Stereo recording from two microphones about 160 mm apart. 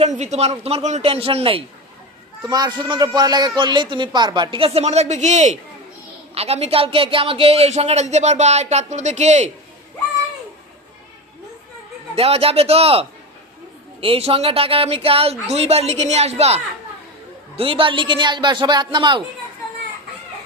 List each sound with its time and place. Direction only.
0.0 s speech: 45° right (ahead or behind)
2.4 s a man's voice: 25° right (ahead or behind); by 9.5 s 45° right (ahead or behind)
12.1 s speech: 35° right (ahead or behind)
17.6 s a man's voice: 35° right (ahead or behind)